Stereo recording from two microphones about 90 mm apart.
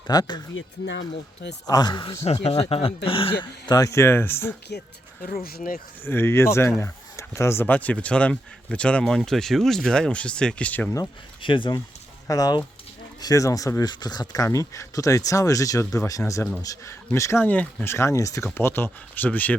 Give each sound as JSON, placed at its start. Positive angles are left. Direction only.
{"t": 0.1, "sound": "speech", "side_deg": 50}
{"t": 1.6, "sound": "speech", "side_deg": 45}
{"t": 3.8, "sound": "speech", "side_deg": 35}
{"t": 6.1, "sound": "speech", "side_deg": 30}
{"t": 11.4, "sound": "speech", "side_deg": 65}
{"t": 12.3, "sound": "speech", "side_deg": 45}
{"t": 13.9, "sound": "speech", "side_deg": 50}
{"t": 14.4, "sound": "speech", "side_deg": 35}
{"t": 16.9, "sound": "speech", "side_deg": 30}
{"t": 17.4, "sound": "speech", "side_deg": 15}
{"t": 17.8, "sound": "speech", "side_deg": 30}
{"t": 18.5, "sound": "speech", "side_deg": 25}